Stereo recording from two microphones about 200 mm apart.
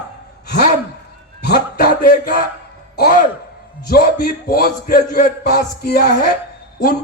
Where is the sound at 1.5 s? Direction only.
45° left (ahead or behind).